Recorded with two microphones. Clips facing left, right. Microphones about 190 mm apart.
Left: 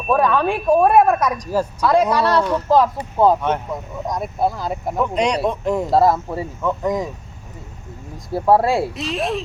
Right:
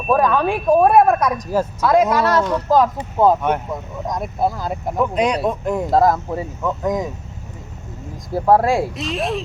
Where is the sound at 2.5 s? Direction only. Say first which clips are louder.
Even; centre (ahead or behind).